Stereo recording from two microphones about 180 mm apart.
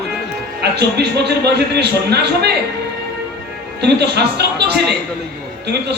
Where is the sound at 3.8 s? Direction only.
70° right (ahead or behind).